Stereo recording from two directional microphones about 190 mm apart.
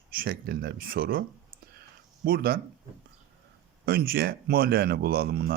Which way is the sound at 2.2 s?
50° right (ahead or behind).